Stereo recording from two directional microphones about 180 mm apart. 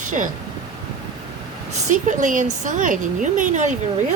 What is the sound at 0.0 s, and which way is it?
Speech, 45° right (ahead or behind).